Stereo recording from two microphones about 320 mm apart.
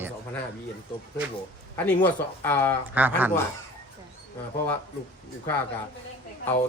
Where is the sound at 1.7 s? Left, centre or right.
Centre.